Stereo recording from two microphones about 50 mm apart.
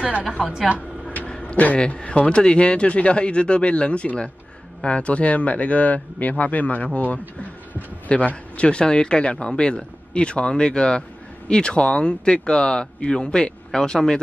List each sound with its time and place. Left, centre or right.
0.3 s a woman's voice: centre
1.0 s a sound: left
1.8 s a man's voice: left